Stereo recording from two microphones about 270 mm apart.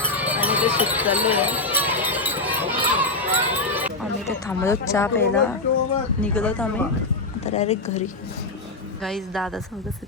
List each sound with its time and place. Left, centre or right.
0.2 s jingle bell: centre
4.4 s speech: centre
7.4 s speech: left
9.0 s speech: centre